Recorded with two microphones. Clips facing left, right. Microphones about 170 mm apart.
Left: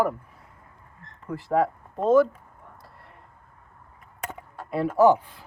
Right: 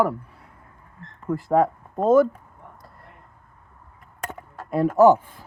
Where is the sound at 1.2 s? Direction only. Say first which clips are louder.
Right 4 dB; 50° right (ahead or behind).